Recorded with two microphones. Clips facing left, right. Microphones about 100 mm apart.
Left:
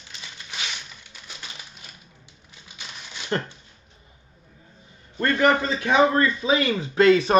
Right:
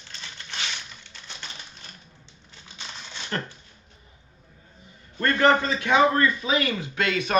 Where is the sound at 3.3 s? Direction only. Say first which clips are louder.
Left 4 dB; 30° left (ahead or behind).